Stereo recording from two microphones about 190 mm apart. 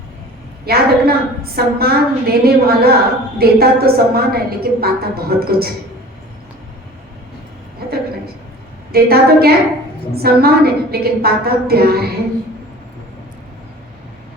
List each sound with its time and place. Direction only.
0.6 s a woman's voice: 55° right (ahead or behind)
7.8 s a sound: 55° right (ahead or behind)
8.9 s a woman's voice: 55° right (ahead or behind)